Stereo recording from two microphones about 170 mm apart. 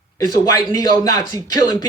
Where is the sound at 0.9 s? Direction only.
20° left (ahead or behind).